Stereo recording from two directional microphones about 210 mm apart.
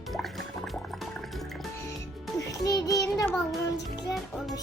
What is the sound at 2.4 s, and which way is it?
Child singing, 15° left (ahead or behind).